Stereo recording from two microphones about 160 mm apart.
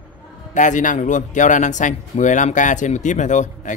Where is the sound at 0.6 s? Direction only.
50° left (ahead or behind).